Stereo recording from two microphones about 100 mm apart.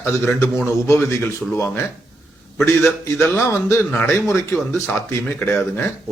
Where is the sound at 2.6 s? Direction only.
25° left (ahead or behind).